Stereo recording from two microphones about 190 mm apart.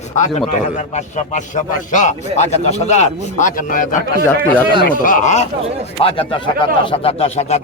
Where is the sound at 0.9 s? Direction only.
40° left (ahead or behind).